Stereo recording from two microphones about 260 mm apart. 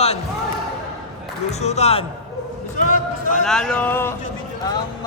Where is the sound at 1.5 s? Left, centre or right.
Left.